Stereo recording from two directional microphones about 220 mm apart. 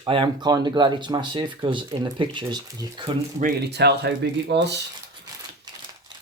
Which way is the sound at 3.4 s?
50° right (ahead or behind).